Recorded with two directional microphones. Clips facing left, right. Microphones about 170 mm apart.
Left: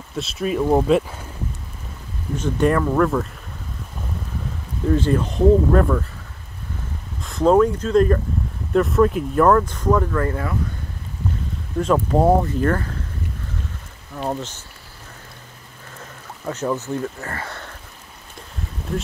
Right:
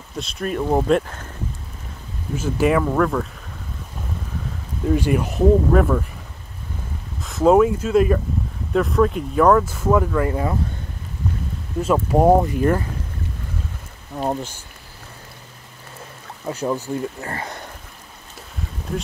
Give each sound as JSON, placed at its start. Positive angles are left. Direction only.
{"t": 0.1, "sound": "speech", "side_deg": 0}
{"t": 2.3, "sound": "speech", "side_deg": -5}
{"t": 4.8, "sound": "speech", "side_deg": -10}
{"t": 7.2, "sound": "speech", "side_deg": -5}
{"t": 11.8, "sound": "speech", "side_deg": -10}
{"t": 14.3, "sound": "speech", "side_deg": -10}
{"t": 16.4, "sound": "speech", "side_deg": -15}